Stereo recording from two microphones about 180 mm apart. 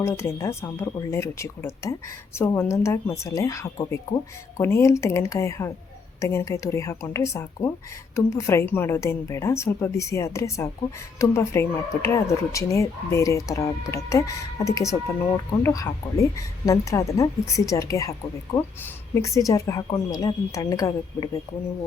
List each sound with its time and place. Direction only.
0.0 s a woman's voice: 15° left (ahead or behind)